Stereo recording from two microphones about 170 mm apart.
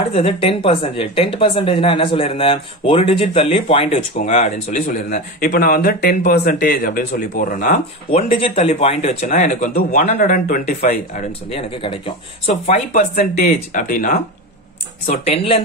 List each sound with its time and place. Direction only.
0.1 s speech: 35° left (ahead or behind); by 8.2 s 50° left (ahead or behind)
8.2 s speech: 35° left (ahead or behind)
13.2 s speech: 50° left (ahead or behind)
15.2 s speech: 35° left (ahead or behind)